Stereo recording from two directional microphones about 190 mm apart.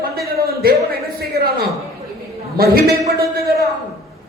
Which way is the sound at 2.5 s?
55° right (ahead or behind).